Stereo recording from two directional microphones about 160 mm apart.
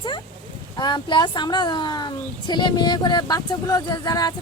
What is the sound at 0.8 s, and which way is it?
Speech, 25° left (ahead or behind).